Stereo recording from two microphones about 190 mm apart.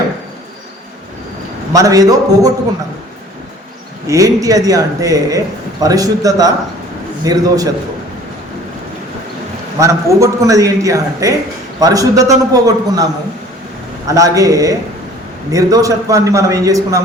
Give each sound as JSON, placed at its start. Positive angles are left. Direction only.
{"t": 1.7, "sound": "a man's voice", "side_deg": -20}
{"t": 4.0, "sound": "a man's voice", "side_deg": -15}
{"t": 9.7, "sound": "a man's voice", "side_deg": -15}
{"t": 14.1, "sound": "a man's voice", "side_deg": -15}